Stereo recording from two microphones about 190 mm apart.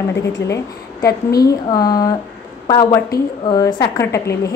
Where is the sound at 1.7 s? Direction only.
20° left (ahead or behind).